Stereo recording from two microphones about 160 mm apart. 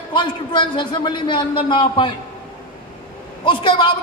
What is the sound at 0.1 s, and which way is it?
A man's voice, 30° left (ahead or behind).